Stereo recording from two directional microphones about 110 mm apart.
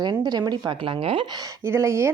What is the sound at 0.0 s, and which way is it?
A woman's voice, 40° right (ahead or behind).